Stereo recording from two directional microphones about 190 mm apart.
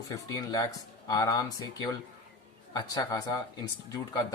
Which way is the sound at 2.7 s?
20° left (ahead or behind).